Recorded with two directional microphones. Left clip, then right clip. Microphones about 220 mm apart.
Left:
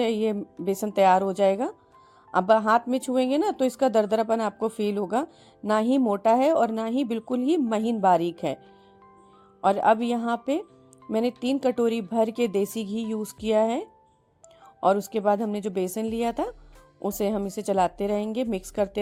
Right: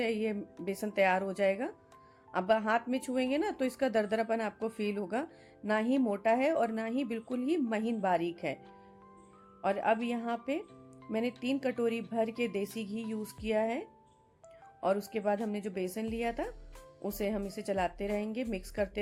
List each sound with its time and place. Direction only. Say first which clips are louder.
0.0 s speech: left 8 dB; 35° left (ahead or behind)
9.6 s speech: left 9 dB; 35° left (ahead or behind)